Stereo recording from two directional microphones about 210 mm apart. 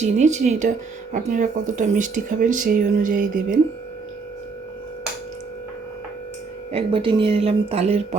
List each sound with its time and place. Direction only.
0.0 s speech: 35° right (ahead or behind)
6.7 s speech: 25° right (ahead or behind)